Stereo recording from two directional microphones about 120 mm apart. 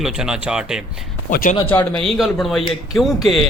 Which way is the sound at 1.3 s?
90° left.